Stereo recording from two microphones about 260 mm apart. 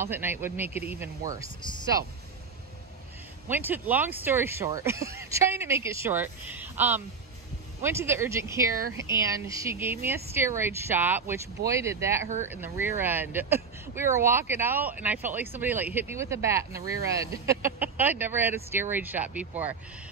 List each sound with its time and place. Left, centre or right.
0.0 s speech: centre
1.4 s speech: centre
3.4 s speech: centre